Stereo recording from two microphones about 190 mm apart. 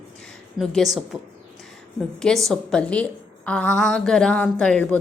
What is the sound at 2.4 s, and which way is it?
A woman's voice, 5° left (ahead or behind).